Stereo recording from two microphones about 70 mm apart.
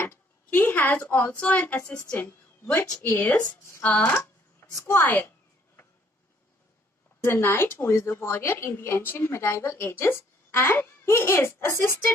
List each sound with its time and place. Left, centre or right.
0.0 s a woman's voice: left
4.6 s a woman's voice: left
4.9 s a woman's voice: left
7.3 s a woman's voice: left